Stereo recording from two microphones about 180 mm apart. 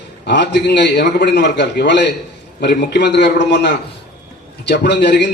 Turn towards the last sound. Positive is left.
turn(degrees=75)  # may be behind; listen again after turning